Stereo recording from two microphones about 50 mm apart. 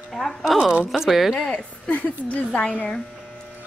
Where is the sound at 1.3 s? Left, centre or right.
Centre.